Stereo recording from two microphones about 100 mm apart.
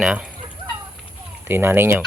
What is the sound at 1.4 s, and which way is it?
Speech, 20° right (ahead or behind).